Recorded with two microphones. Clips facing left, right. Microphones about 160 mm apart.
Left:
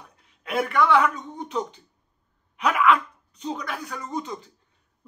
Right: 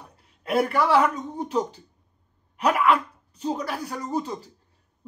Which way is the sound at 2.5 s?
35° right (ahead or behind).